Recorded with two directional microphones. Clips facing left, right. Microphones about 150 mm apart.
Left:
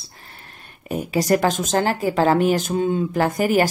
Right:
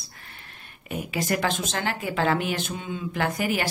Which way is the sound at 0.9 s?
40° left (ahead or behind).